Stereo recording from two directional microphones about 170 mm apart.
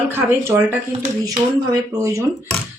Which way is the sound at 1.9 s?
20° right (ahead or behind).